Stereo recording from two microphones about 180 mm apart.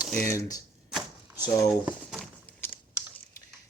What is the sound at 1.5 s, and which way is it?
Speech, 20° left (ahead or behind).